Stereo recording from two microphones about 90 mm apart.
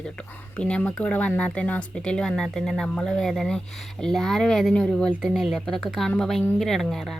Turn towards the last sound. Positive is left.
turn(degrees=5)  # may be behind; listen again after turning